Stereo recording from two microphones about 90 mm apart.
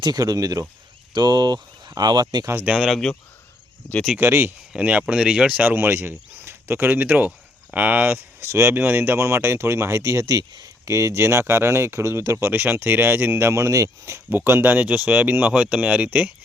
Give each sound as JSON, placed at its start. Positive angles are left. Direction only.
{"t": 0.0, "sound": "speech", "side_deg": -45}
{"t": 2.6, "sound": "speech", "side_deg": -5}
{"t": 4.2, "sound": "speech", "side_deg": -25}
{"t": 4.7, "sound": "speech", "side_deg": -15}
{"t": 8.4, "sound": "speech", "side_deg": -30}
{"t": 14.3, "sound": "speech", "side_deg": -25}